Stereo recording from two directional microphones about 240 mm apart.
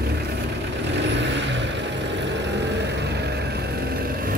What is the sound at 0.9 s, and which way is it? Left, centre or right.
Vehicle, right.